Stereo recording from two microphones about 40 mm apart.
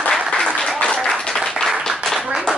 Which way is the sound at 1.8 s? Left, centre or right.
Centre.